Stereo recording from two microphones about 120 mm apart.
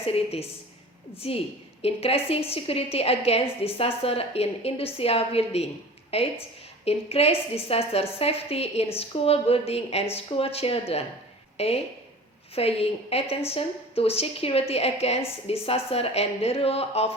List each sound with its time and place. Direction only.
0.0 s a woman's voice: 55° left (ahead or behind)